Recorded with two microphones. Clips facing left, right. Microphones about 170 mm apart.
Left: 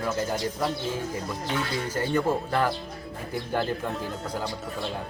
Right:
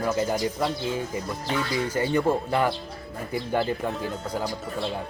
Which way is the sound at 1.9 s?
10° right (ahead or behind).